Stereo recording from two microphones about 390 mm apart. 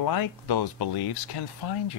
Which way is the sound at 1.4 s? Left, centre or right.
Left.